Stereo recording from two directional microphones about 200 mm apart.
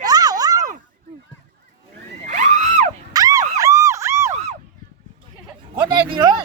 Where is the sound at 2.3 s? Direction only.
40° right (ahead or behind).